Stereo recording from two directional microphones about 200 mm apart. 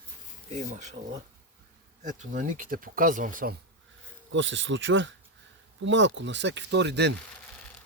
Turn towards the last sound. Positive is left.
turn(degrees=-60)  # may be behind; listen again after turning